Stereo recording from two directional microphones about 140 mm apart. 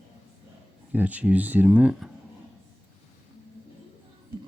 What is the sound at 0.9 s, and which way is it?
Speech, 10° right (ahead or behind).